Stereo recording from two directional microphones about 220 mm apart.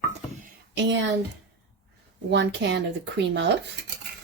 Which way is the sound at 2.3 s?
55° right (ahead or behind).